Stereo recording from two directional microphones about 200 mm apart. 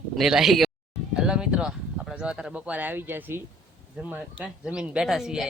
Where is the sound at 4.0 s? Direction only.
5° right (ahead or behind).